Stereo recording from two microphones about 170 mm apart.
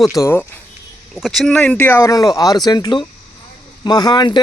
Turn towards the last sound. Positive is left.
turn(degrees=25)  # may be behind; listen again after turning